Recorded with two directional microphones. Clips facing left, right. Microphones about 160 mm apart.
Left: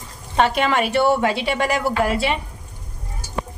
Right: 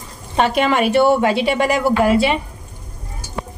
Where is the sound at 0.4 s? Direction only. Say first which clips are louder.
Right 2 dB; 15° right (ahead or behind).